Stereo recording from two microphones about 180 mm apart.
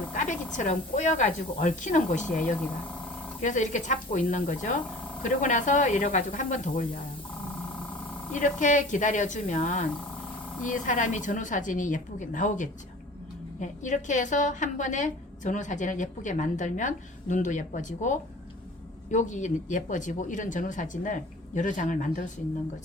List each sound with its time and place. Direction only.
0.1 s speech: 45° left (ahead or behind)
3.4 s a woman's voice: 45° left (ahead or behind)
8.3 s a woman's voice: 45° left (ahead or behind)